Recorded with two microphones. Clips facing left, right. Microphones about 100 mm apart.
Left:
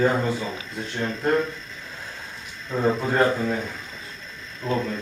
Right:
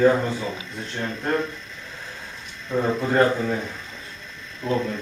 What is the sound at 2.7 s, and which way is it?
Speech, 5° left (ahead or behind).